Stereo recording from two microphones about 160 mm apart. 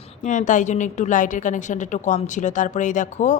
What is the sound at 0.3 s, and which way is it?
A woman's voice, 50° left (ahead or behind).